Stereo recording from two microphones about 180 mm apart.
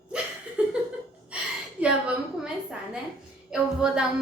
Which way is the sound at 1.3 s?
5° right (ahead or behind).